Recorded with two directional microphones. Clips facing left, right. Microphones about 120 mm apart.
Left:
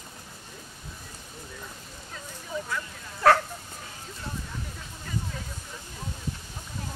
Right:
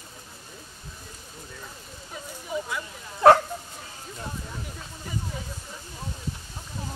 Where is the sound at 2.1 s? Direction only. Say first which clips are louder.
Right 3 dB; 15° right (ahead or behind).